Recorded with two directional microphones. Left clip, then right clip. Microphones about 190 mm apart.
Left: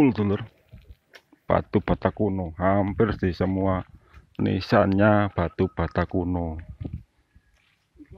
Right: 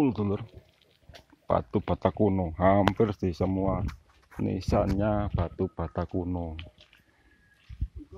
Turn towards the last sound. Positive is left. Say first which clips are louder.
# left 6 dB
turn(degrees=25)  # may be behind; listen again after turning